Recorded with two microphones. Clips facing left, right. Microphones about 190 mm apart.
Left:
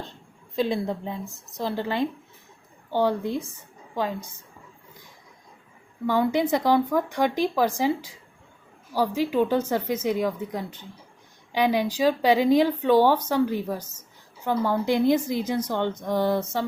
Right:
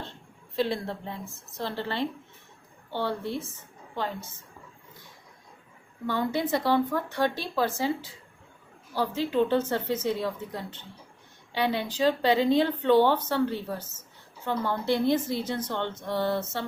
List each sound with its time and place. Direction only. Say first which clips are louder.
0.5 s a woman's voice: left 3 dB; 15° left (ahead or behind)
6.1 s a woman's voice: left 5 dB; 15° left (ahead or behind)